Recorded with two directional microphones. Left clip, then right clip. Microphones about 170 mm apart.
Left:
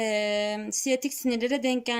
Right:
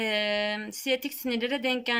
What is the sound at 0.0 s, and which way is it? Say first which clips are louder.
Speech: left 1 dB; 25° left (ahead or behind).